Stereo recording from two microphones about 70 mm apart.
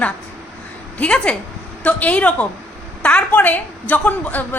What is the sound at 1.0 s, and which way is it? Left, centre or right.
A woman's voice, centre.